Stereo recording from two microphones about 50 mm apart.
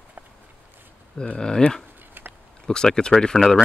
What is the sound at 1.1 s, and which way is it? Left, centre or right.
Speech, left.